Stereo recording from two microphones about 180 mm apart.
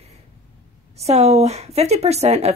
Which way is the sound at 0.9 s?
35° right (ahead or behind).